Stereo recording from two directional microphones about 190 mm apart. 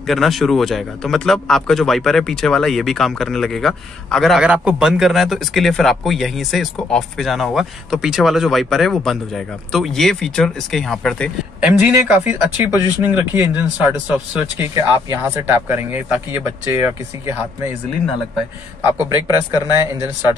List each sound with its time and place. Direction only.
0.0 s speech: centre (ahead or behind)
11.6 s speech: 5° right (ahead or behind)
18.9 s speech: 15° right (ahead or behind)